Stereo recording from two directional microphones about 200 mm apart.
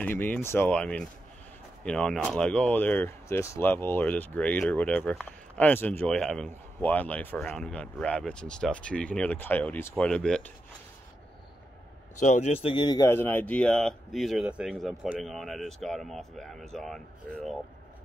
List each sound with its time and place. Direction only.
0.0 s speech: 10° left (ahead or behind)
12.2 s speech: 35° left (ahead or behind)
12.6 s a man's voice: 25° left (ahead or behind)
13.2 s speech: 10° left (ahead or behind)